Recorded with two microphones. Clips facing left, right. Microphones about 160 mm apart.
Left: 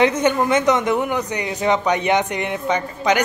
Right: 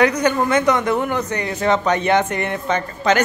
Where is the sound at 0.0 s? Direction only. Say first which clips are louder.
Even; 20° left (ahead or behind).